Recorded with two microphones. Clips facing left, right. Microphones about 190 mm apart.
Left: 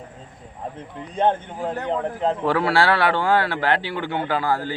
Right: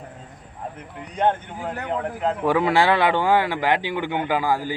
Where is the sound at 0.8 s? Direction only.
25° left (ahead or behind).